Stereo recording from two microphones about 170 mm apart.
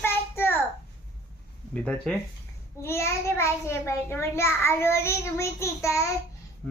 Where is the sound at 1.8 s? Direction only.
5° left (ahead or behind).